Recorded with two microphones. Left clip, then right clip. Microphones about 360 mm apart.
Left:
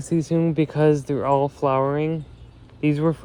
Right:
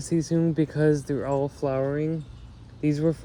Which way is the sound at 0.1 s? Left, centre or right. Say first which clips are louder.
Left 3 dB; left.